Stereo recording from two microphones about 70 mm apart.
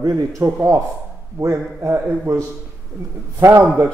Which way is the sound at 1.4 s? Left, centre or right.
Right.